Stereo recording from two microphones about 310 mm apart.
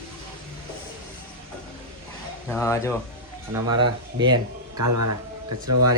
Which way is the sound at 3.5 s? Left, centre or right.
Centre.